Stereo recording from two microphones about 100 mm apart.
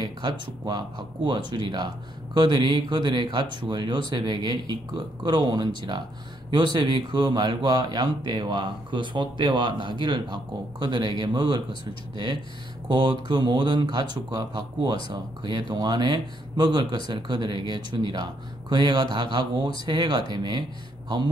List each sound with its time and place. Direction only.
0.0 s speech: 45° right (ahead or behind)
12.8 s speech: 55° right (ahead or behind)